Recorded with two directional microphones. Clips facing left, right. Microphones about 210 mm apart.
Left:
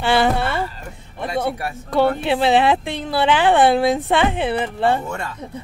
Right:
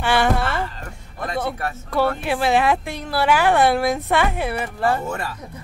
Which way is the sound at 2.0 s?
25° left (ahead or behind).